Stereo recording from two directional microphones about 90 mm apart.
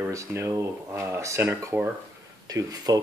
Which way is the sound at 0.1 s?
30° right (ahead or behind).